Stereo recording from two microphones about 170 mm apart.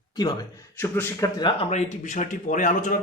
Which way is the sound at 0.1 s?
20° left (ahead or behind).